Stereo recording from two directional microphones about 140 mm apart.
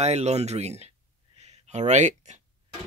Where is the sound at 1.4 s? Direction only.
55° right (ahead or behind).